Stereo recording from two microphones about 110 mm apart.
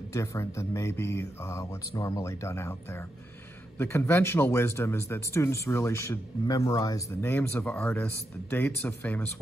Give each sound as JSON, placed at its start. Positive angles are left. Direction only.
{"t": 0.1, "sound": "speech", "side_deg": 30}